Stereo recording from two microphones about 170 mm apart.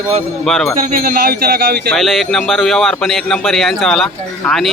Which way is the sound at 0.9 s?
55° right (ahead or behind).